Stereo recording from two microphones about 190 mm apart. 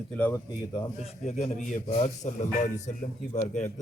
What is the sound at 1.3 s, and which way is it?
A man's voice, 35° left (ahead or behind).